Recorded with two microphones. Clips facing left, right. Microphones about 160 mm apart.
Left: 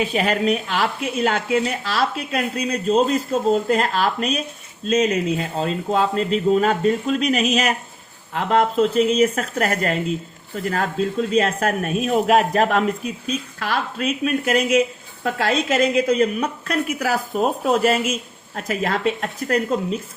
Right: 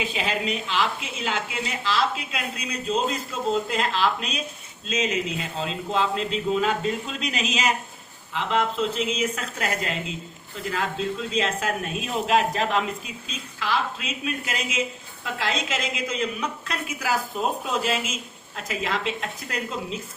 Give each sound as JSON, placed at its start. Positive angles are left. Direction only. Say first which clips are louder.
{"t": 0.0, "sound": "a woman's voice", "louder": "left 7 dB", "side_deg": 55}
{"t": 5.5, "sound": "a woman's voice", "louder": "left 4 dB", "side_deg": 45}